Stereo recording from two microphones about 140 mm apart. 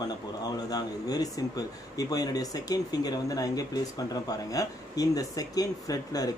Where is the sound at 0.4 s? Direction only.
25° left (ahead or behind).